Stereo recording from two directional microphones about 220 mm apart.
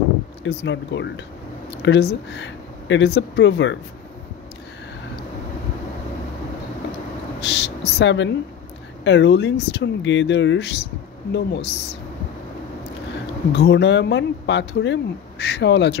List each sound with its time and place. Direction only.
0.4 s speech: 55° left (ahead or behind)
7.3 s speech: 50° left (ahead or behind)
13.5 s speech: 50° left (ahead or behind)